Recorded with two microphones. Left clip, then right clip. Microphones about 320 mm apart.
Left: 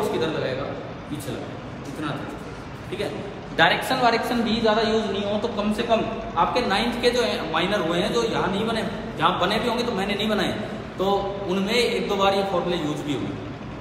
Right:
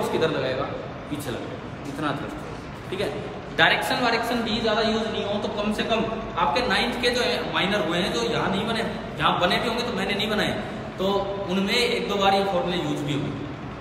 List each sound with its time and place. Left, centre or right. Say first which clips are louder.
0.0 s a man's voice: right 1 dB; centre
3.6 s a woman's voice: left 1 dB; centre
4.0 s a man's voice: left 2 dB; centre